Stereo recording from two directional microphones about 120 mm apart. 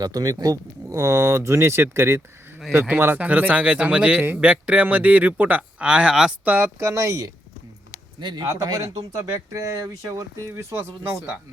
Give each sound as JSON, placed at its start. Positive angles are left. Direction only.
{"t": 0.0, "sound": "a man's voice", "side_deg": -30}
{"t": 8.2, "sound": "speech", "side_deg": -40}